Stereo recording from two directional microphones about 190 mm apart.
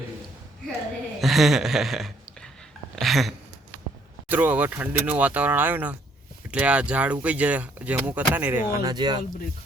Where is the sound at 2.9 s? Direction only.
Centre (ahead or behind).